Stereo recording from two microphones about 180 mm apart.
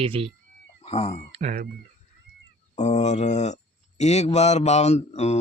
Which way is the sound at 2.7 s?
40° left (ahead or behind).